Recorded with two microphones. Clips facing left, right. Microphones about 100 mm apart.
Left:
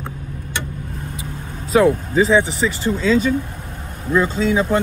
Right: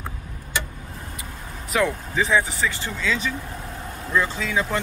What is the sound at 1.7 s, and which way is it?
Speech, 30° left (ahead or behind).